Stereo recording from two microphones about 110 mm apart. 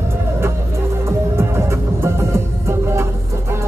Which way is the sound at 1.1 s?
25° right (ahead or behind).